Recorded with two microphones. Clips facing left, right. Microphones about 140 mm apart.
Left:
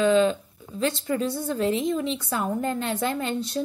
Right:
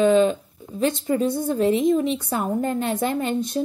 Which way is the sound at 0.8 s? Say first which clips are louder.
Right 4 dB; 20° right (ahead or behind).